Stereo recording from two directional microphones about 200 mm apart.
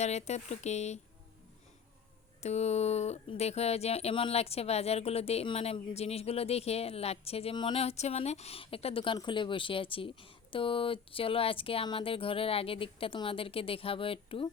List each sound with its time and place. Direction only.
0.0 s speech: 35° left (ahead or behind)
2.4 s speech: 35° left (ahead or behind)